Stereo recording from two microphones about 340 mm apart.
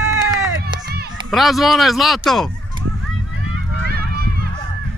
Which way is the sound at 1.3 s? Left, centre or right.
Centre.